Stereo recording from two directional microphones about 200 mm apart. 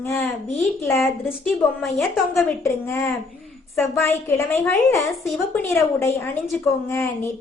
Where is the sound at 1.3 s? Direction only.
Centre (ahead or behind).